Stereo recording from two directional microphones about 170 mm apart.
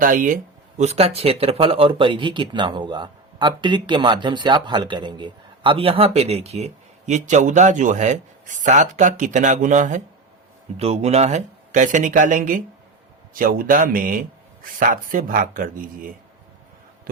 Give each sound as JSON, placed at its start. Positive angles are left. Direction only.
{"t": 0.0, "sound": "speech", "side_deg": -50}
{"t": 0.8, "sound": "speech", "side_deg": -40}